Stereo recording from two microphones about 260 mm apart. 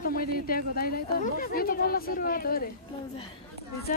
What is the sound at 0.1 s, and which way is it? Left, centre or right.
Speech, left.